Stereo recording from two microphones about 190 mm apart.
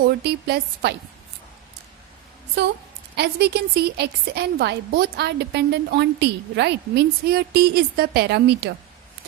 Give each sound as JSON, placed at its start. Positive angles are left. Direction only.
{"t": 0.0, "sound": "a woman's voice", "side_deg": -60}
{"t": 3.2, "sound": "a woman's voice", "side_deg": -60}